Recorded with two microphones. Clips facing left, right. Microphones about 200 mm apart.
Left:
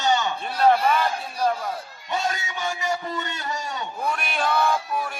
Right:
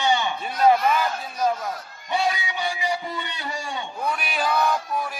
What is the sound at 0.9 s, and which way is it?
Speech, 5° right (ahead or behind).